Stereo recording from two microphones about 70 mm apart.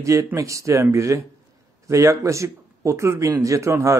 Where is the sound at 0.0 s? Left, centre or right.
Right.